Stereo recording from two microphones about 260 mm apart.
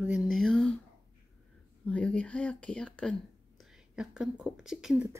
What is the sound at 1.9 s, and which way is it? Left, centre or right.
Speech, centre.